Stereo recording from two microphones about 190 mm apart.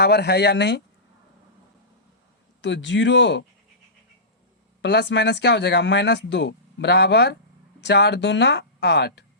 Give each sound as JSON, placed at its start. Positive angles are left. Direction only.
{"t": 0.0, "sound": "speech", "side_deg": 60}
{"t": 2.6, "sound": "speech", "side_deg": 70}
{"t": 4.8, "sound": "speech", "side_deg": 65}